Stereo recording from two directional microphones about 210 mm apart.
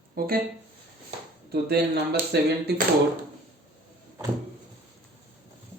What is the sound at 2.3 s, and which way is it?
Music, 50° right (ahead or behind).